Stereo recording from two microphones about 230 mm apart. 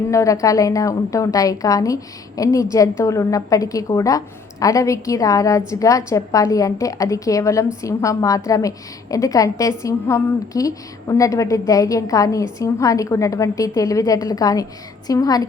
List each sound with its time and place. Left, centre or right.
0.1 s a woman's voice: centre